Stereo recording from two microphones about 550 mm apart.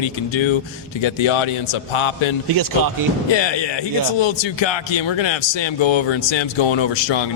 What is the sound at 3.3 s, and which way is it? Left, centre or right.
A man's voice, left.